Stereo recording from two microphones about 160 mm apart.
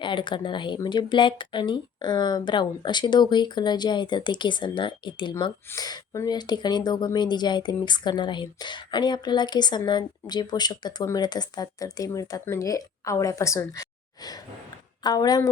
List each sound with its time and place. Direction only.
0.0 s speech: 30° left (ahead or behind)